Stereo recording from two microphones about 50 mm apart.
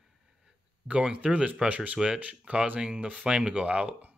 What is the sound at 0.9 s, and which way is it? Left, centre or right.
Speech, right.